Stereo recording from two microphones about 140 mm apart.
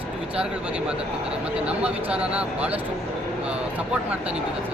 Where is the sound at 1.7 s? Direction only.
10° right (ahead or behind).